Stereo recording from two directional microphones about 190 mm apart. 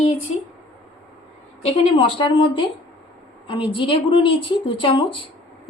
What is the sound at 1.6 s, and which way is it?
A woman's voice, 35° left (ahead or behind).